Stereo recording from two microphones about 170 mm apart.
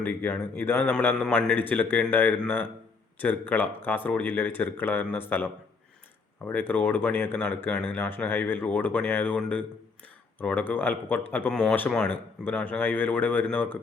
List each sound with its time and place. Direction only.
0.0 s speech: 10° left (ahead or behind)
6.5 s speech: 10° left (ahead or behind)